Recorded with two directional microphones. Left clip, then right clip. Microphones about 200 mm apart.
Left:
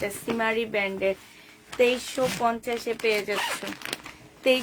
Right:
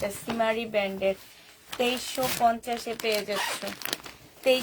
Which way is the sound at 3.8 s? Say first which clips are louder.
Right 2 dB; 15° right (ahead or behind).